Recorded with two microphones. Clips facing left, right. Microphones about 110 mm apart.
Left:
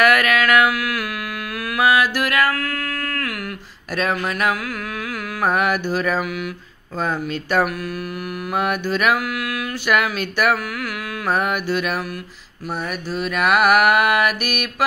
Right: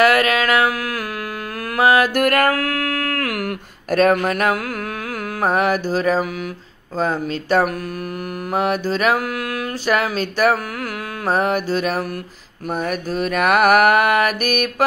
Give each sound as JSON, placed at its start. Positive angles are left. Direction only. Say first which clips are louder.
{"t": 0.0, "sound": "mantra", "louder": "right 1 dB", "side_deg": -30}
{"t": 1.8, "sound": "a sound", "louder": "right 3 dB", "side_deg": -40}
{"t": 5.4, "sound": "mantra", "louder": "right 1 dB", "side_deg": -35}